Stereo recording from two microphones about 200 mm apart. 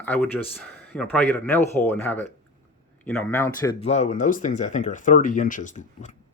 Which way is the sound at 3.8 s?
35° left (ahead or behind).